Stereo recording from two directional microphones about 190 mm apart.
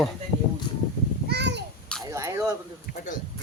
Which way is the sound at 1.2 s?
60° right (ahead or behind).